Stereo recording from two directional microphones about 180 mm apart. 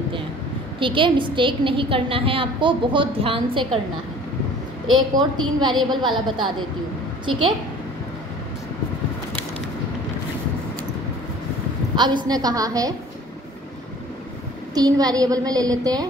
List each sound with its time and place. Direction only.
0.7 s a woman's voice: 30° right (ahead or behind)
4.9 s a woman's voice: 25° right (ahead or behind)
11.9 s a woman's voice: 25° right (ahead or behind)
14.7 s a woman's voice: 20° right (ahead or behind)